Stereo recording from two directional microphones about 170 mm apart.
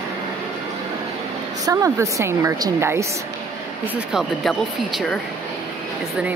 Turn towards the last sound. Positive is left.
turn(degrees=0)  # may be behind; listen again after turning